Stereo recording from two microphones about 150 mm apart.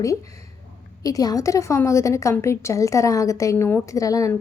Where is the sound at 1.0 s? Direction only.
25° left (ahead or behind).